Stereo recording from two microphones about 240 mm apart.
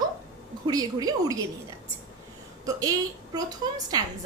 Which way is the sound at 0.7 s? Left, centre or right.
Centre.